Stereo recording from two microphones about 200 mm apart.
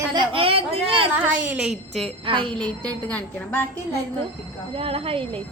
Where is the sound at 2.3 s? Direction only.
25° right (ahead or behind).